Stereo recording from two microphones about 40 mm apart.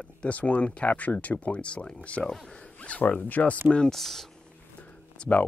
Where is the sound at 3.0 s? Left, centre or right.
Left.